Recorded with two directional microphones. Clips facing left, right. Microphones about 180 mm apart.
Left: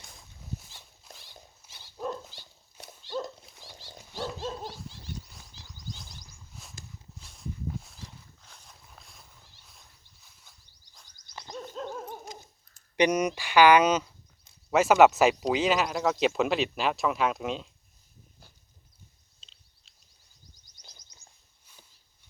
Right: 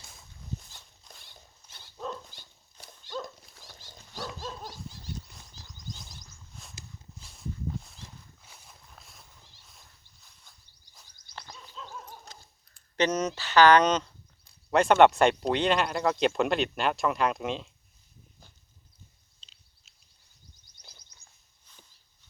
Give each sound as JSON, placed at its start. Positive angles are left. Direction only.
{"t": 0.0, "sound": "walk", "side_deg": 0}
{"t": 3.2, "sound": "dog", "side_deg": 25}
{"t": 5.2, "sound": "a sound", "side_deg": 0}
{"t": 11.5, "sound": "owl", "side_deg": 50}
{"t": 13.0, "sound": "speech", "side_deg": 10}
{"t": 19.4, "sound": "a sound", "side_deg": 0}